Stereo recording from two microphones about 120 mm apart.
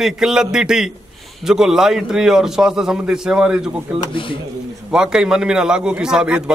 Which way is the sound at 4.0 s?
45° left (ahead or behind).